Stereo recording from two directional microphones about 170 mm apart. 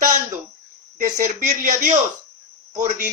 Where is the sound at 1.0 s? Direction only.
45° right (ahead or behind).